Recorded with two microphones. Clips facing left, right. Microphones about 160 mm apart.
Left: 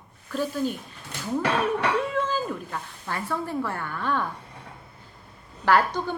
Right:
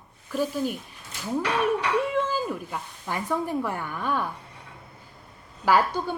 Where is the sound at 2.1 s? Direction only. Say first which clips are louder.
Right 1 dB; 10° right (ahead or behind).